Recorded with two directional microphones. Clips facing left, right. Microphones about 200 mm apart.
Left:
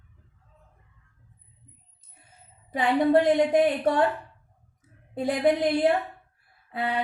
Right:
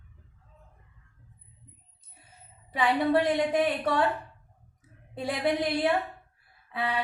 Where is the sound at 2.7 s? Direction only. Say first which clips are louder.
Left 4 dB; 50° left (ahead or behind).